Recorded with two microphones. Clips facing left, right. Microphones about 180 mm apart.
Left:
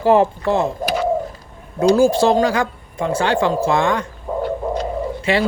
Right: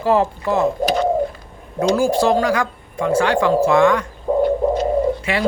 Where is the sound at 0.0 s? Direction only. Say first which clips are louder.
Left 3 dB; 30° left (ahead or behind).